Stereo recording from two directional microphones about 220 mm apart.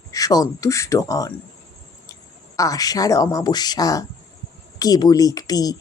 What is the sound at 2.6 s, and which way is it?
A woman's voice, 15° left (ahead or behind).